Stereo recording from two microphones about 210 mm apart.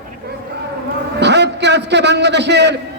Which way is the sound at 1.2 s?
55° right (ahead or behind).